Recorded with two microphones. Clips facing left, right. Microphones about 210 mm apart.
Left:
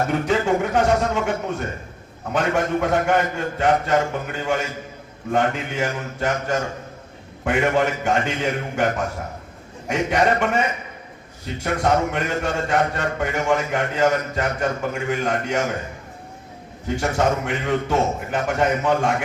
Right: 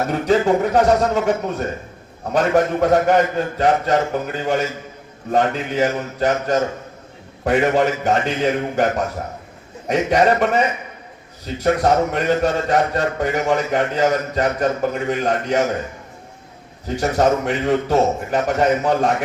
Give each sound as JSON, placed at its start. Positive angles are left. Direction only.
{"t": 0.1, "sound": "a man's voice", "side_deg": -40}
{"t": 16.8, "sound": "a man's voice", "side_deg": -40}